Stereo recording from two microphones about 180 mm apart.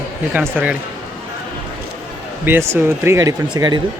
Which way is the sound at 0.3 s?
10° right (ahead or behind).